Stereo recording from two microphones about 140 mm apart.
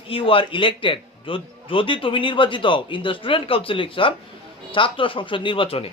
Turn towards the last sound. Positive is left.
turn(degrees=40)  # may be behind; listen again after turning